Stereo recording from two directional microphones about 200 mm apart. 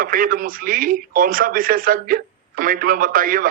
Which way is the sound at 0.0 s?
45° right (ahead or behind).